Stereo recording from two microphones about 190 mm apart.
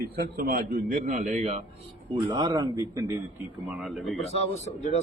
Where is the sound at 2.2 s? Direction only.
25° right (ahead or behind).